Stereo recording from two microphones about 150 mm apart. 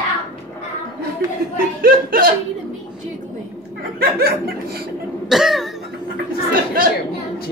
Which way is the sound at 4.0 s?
90° right.